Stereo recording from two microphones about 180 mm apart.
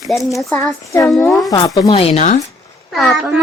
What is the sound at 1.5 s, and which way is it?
Speech, 20° left (ahead or behind).